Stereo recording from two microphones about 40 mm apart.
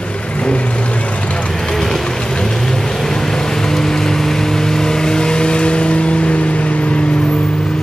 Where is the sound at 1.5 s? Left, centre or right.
Centre; by 7.7 s left.